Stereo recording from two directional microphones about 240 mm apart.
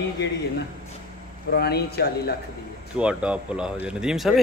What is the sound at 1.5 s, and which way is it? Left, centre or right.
Speech, left.